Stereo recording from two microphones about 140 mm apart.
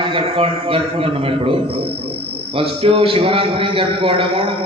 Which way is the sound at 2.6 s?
40° right (ahead or behind).